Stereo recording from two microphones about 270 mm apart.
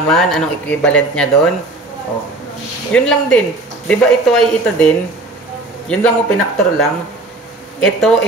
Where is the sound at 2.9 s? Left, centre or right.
Centre.